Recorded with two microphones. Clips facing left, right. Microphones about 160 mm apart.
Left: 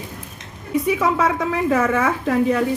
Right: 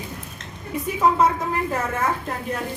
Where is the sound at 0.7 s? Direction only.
80° left.